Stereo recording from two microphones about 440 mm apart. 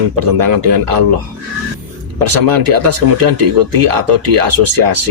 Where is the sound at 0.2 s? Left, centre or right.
Right.